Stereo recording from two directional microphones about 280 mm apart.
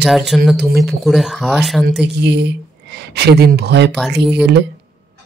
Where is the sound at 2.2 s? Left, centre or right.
Right.